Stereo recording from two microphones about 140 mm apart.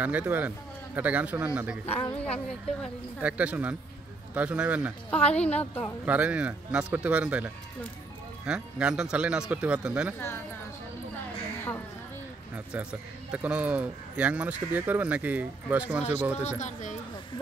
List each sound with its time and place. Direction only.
0.0 s speech: 10° right (ahead or behind)
2.1 s a woman's voice: 10° left (ahead or behind)
3.2 s speech: 10° right (ahead or behind)
5.1 s a woman's voice: 10° left (ahead or behind)
6.0 s speech: 10° right (ahead or behind)
12.7 s speech: 10° right (ahead or behind)
16.4 s speech: 55° left (ahead or behind)